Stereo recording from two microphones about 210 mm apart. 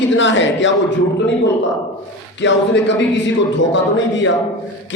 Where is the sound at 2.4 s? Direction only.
60° left (ahead or behind).